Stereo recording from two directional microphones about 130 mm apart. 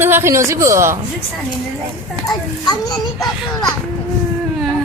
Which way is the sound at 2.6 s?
30° left (ahead or behind).